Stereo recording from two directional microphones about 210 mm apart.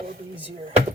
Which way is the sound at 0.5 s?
40° right (ahead or behind).